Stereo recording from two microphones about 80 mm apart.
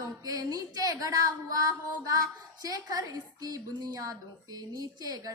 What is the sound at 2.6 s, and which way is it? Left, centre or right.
Speech, right.